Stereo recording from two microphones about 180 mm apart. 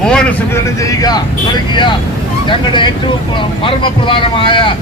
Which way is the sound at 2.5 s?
25° left (ahead or behind).